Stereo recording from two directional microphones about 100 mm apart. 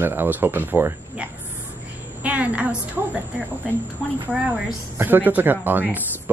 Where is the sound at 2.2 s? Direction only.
15° right (ahead or behind).